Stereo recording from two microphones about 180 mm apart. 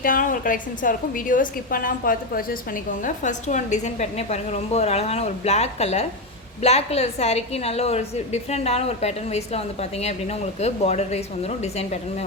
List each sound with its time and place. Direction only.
0.0 s a woman's voice: 50° left (ahead or behind)